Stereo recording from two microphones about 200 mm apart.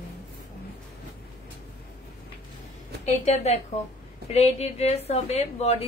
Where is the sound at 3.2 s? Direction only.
35° left (ahead or behind).